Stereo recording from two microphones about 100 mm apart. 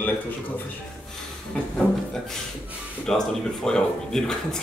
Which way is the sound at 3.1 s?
5° left (ahead or behind).